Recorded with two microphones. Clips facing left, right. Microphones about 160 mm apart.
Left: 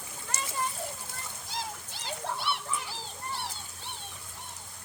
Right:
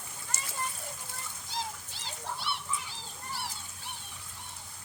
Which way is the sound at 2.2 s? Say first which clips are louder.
Left 3 dB; 65° left (ahead or behind).